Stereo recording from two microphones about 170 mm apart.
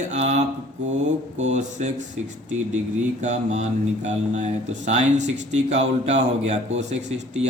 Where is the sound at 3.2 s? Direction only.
45° right (ahead or behind).